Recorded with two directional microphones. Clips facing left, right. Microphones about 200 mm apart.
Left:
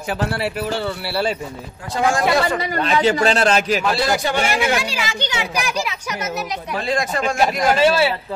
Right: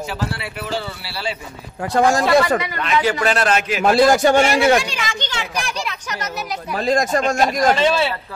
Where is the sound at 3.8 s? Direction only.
50° right (ahead or behind).